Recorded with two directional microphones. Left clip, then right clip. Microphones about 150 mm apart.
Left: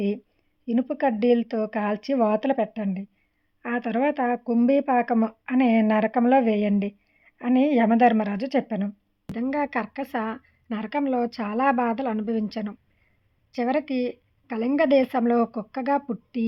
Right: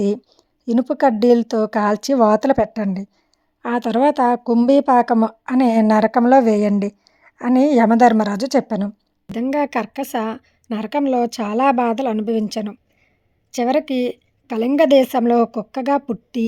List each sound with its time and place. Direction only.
0.0 s speech: 40° right (ahead or behind)
9.3 s speech: 50° right (ahead or behind)